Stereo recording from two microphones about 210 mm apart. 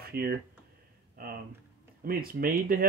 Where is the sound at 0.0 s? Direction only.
45° right (ahead or behind).